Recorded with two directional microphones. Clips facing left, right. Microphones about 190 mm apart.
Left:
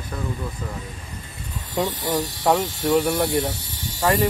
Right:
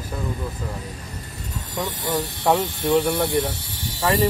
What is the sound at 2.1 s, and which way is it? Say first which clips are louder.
Speech: right 2 dB; centre (ahead or behind).